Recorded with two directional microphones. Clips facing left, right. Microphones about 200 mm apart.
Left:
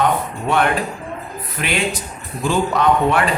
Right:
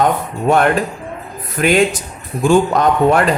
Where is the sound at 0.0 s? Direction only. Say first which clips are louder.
Right 3 dB; 45° right (ahead or behind).